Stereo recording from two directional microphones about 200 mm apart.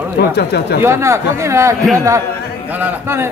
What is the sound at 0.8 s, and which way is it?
Speech, 15° right (ahead or behind).